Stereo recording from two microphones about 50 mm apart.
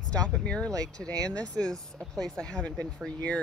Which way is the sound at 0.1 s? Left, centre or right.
Centre.